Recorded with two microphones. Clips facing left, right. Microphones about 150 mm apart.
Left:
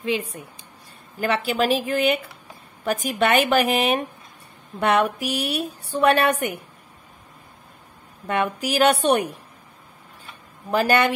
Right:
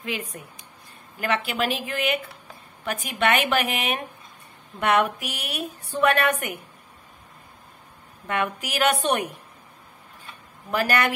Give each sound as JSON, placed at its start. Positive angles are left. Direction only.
{"t": 0.0, "sound": "a woman's voice", "side_deg": 25}
{"t": 8.3, "sound": "a woman's voice", "side_deg": 35}
{"t": 10.7, "sound": "speech", "side_deg": 30}